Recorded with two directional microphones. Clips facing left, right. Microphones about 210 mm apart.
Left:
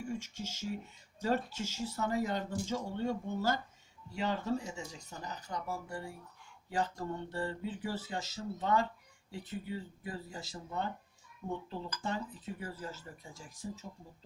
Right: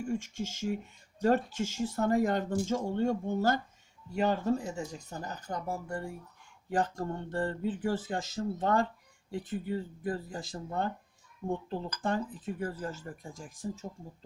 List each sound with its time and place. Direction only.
0.0 s speech: 50° right (ahead or behind)
11.9 s speech: 50° right (ahead or behind)